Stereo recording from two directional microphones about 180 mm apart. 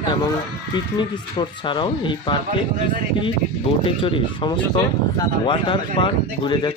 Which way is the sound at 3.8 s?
30° left (ahead or behind).